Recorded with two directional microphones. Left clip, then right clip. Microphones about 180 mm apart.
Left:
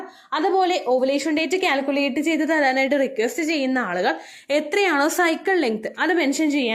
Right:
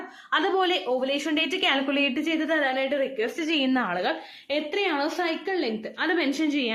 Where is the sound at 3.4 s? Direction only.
10° left (ahead or behind).